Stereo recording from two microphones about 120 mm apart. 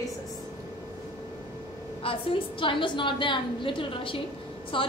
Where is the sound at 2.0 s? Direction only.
50° left (ahead or behind).